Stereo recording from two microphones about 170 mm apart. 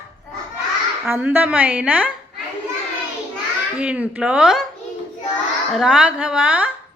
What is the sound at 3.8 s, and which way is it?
Speech, 5° right (ahead or behind).